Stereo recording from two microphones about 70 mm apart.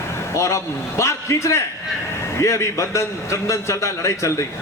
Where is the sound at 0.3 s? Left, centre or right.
Left.